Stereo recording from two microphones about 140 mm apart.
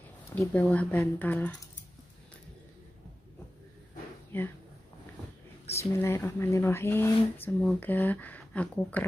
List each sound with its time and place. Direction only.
0.3 s speech: 10° left (ahead or behind)
4.3 s speech: 15° left (ahead or behind)
5.7 s speech: 15° left (ahead or behind)